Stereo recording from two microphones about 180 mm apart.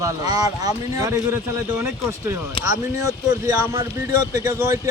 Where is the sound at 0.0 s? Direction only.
20° right (ahead or behind).